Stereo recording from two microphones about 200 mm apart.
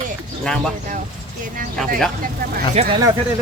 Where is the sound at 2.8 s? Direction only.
30° right (ahead or behind).